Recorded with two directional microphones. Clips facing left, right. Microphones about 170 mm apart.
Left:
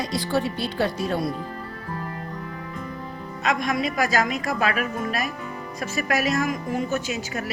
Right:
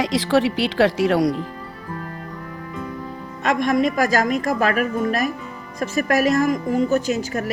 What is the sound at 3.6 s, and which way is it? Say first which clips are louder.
A woman's voice: right 6 dB; 45° right (ahead or behind).